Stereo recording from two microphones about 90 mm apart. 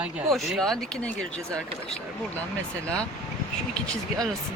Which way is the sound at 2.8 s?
10° left (ahead or behind).